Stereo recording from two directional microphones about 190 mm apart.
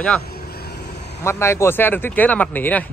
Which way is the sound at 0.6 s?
55° left (ahead or behind).